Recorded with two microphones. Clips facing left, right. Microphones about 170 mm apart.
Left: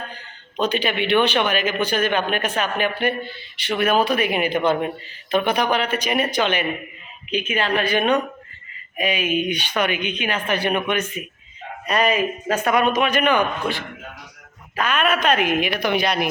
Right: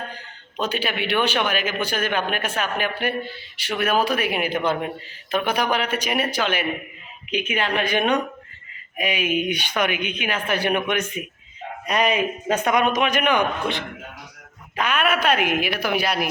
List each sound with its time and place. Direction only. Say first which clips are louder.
0.5 s speech: left 4 dB; 5° right (ahead or behind)